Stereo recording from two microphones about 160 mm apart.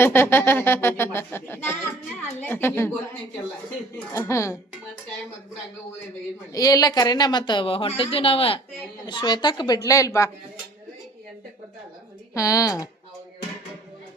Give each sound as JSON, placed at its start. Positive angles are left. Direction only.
{"t": 0.0, "sound": "speech", "side_deg": 15}
{"t": 3.9, "sound": "speech", "side_deg": 15}
{"t": 6.5, "sound": "speech", "side_deg": 20}
{"t": 12.3, "sound": "speech", "side_deg": 20}